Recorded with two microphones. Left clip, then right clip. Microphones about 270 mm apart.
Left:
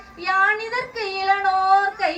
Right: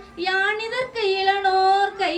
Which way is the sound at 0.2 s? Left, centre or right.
Centre.